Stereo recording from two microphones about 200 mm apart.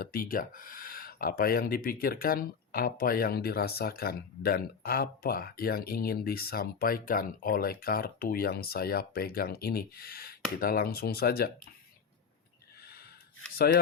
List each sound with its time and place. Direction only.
0.0 s speech: 45° left (ahead or behind)